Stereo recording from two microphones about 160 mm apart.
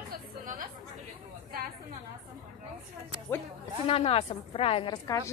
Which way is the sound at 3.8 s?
35° left (ahead or behind).